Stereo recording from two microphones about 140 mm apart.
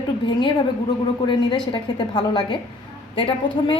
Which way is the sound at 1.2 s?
35° left (ahead or behind).